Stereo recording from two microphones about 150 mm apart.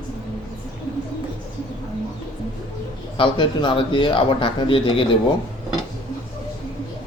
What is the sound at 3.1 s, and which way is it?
Speech, 35° left (ahead or behind).